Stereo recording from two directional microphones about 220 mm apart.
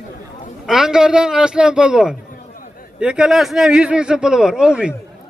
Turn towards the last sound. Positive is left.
turn(degrees=-5)  # may be behind; listen again after turning